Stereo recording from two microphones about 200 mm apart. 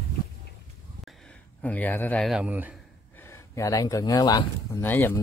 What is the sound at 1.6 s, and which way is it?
A man's voice, 10° left (ahead or behind).